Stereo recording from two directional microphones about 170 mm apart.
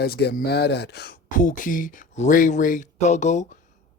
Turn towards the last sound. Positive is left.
turn(degrees=45)  # may be behind; listen again after turning